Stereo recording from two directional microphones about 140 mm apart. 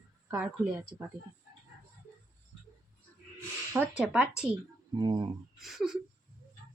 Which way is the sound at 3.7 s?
10° right (ahead or behind).